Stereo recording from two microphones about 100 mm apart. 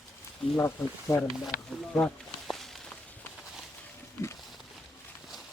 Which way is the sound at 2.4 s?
Centre (ahead or behind).